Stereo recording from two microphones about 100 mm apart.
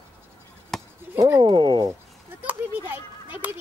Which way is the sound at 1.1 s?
30° right (ahead or behind).